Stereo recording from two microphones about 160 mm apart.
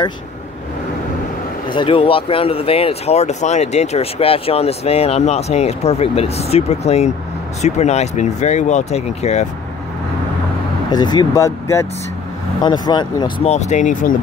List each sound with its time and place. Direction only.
1.7 s speech: 30° left (ahead or behind)
10.9 s speech: 25° left (ahead or behind)
13.4 s speech: 45° left (ahead or behind)